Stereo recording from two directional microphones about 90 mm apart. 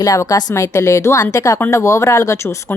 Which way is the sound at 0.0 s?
40° left (ahead or behind).